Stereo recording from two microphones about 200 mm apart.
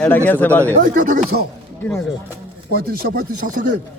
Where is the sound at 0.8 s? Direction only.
45° right (ahead or behind).